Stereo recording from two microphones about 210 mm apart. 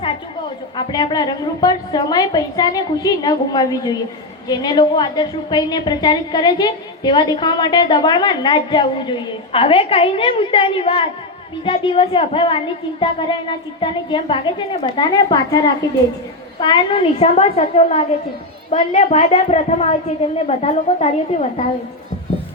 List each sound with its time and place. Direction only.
0.8 s a woman's voice: 20° left (ahead or behind)